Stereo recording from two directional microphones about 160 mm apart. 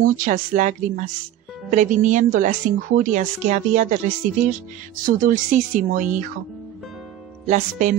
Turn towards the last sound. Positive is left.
turn(degrees=-45)  # may be behind; listen again after turning